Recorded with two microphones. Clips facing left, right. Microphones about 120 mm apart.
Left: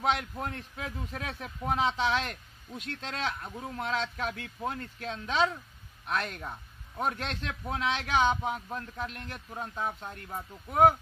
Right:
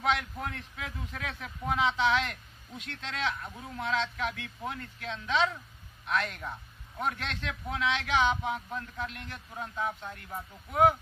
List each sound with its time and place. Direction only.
0.0 s a man's voice: 35° left (ahead or behind)